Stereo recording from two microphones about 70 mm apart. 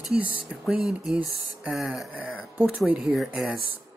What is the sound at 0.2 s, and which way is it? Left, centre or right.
Speech, right.